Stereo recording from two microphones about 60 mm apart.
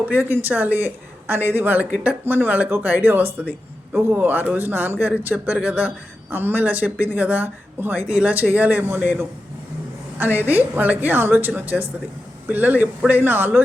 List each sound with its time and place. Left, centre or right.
0.1 s speech: right
6.3 s speech: right
8.0 s speech: centre